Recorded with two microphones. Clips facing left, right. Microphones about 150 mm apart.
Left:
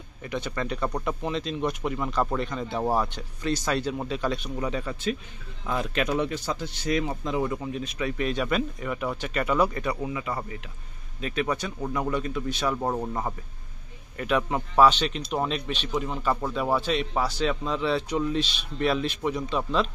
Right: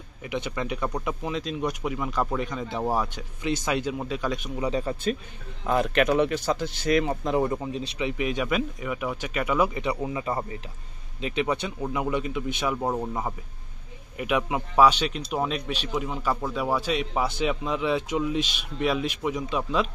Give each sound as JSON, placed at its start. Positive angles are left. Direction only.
{"t": 0.2, "sound": "speech", "side_deg": -10}
{"t": 4.6, "sound": "speech", "side_deg": -30}
{"t": 5.7, "sound": "speech", "side_deg": -60}
{"t": 7.4, "sound": "speech", "side_deg": -30}
{"t": 8.0, "sound": "speech", "side_deg": -15}
{"t": 9.8, "sound": "a man's voice", "side_deg": -20}
{"t": 12.7, "sound": "speech", "side_deg": 0}